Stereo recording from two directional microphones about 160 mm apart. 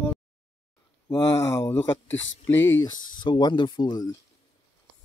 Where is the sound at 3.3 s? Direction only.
30° left (ahead or behind).